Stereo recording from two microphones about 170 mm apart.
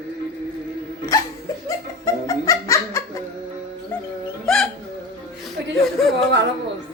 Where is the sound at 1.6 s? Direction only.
20° left (ahead or behind).